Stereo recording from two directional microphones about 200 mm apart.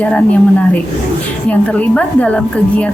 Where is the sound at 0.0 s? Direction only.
5° left (ahead or behind).